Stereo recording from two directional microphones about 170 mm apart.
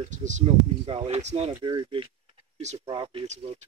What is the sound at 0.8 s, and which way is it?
Speech, 35° right (ahead or behind).